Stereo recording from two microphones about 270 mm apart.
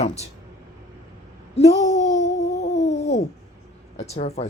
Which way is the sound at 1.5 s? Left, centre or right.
Left.